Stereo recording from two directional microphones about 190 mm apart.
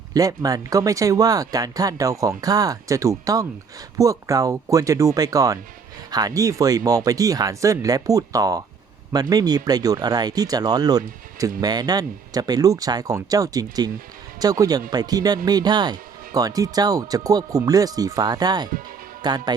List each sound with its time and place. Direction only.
0.1 s speech: 20° right (ahead or behind)